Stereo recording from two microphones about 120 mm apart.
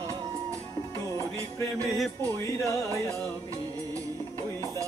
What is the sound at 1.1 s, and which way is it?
Music, 25° left (ahead or behind).